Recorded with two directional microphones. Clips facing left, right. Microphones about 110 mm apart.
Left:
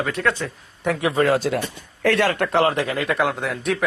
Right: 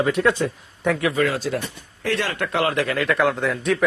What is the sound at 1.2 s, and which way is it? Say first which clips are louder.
Speech: left 3 dB; 45° left (ahead or behind).